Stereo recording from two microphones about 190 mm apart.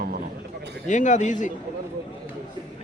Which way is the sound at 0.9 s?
40° left (ahead or behind).